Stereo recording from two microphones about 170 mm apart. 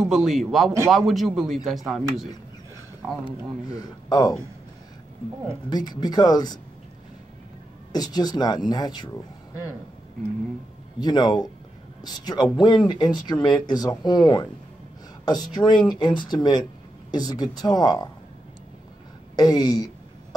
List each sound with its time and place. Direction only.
0.0 s speech: 5° right (ahead or behind)
3.6 s speech: 20° left (ahead or behind)
5.7 s speech: 25° left (ahead or behind)
7.9 s speech: 25° left (ahead or behind)
11.0 s speech: 25° left (ahead or behind)
19.3 s speech: 25° left (ahead or behind)